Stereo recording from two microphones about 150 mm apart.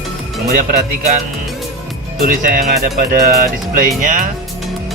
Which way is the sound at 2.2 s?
70° right (ahead or behind).